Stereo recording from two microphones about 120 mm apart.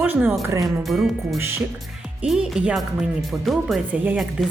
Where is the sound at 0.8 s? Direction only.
Centre (ahead or behind).